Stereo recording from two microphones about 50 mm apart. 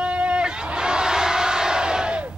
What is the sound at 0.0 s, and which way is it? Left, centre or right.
Crowd, right.